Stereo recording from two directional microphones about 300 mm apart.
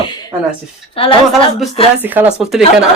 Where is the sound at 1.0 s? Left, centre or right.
Centre.